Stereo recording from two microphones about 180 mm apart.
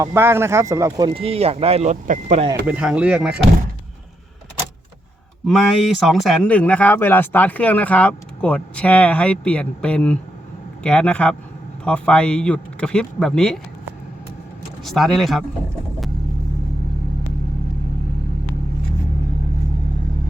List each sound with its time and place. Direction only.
0.0 s speech: 15° right (ahead or behind); by 2.5 s 40° right (ahead or behind)
2.6 s a man's voice: 5° right (ahead or behind)
5.5 s a man's voice: centre (ahead or behind)
14.8 s a man's voice: centre (ahead or behind)